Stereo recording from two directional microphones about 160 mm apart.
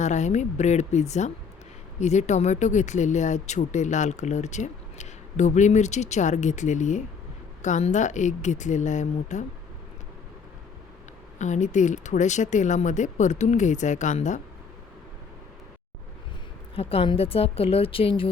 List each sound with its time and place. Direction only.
0.0 s speech: 45° left (ahead or behind)
11.3 s speech: 50° left (ahead or behind)
16.7 s a woman's voice: 35° left (ahead or behind)